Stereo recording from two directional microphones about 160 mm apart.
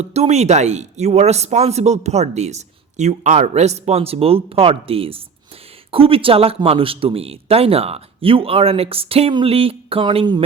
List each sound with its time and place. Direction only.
0.0 s speech: 40° right (ahead or behind)